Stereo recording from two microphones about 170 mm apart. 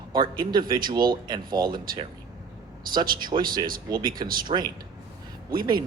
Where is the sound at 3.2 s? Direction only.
25° right (ahead or behind).